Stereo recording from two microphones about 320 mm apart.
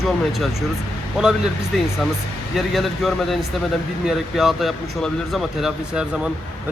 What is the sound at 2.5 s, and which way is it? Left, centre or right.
Speech, centre.